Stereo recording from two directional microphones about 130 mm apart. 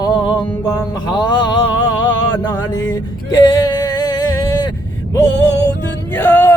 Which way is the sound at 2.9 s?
30° left (ahead or behind).